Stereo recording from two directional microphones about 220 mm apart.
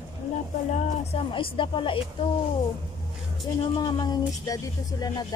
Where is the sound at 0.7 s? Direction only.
30° left (ahead or behind).